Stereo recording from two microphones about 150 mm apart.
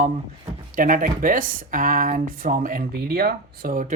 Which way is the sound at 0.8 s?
65° right (ahead or behind).